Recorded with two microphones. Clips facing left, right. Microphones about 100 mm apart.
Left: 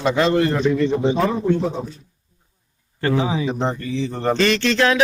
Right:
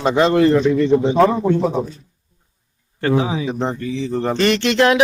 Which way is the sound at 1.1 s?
90° right.